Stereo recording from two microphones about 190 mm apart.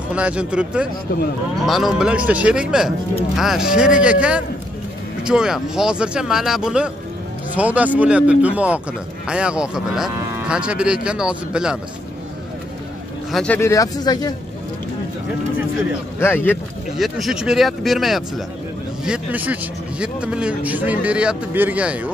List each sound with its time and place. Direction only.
0.1 s a man's voice: 5° right (ahead or behind)
13.3 s speech: 5° left (ahead or behind)
13.6 s speech: 15° left (ahead or behind)
16.2 s speech: 10° left (ahead or behind)
16.9 s a man's voice: centre (ahead or behind)